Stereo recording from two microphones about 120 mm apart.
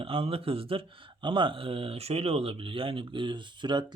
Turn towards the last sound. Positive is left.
turn(degrees=-40)  # may be behind; listen again after turning